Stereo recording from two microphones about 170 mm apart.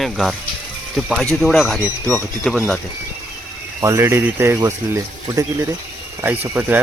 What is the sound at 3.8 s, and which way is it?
Speech, 15° right (ahead or behind).